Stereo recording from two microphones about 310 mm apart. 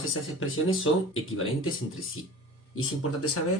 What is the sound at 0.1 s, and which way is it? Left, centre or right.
Speech, left.